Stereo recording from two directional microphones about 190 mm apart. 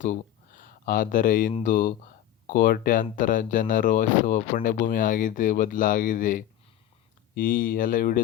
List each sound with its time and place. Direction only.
0.0 s speech: 45° left (ahead or behind)